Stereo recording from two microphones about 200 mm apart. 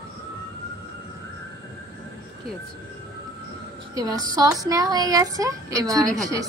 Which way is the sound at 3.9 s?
20° right (ahead or behind).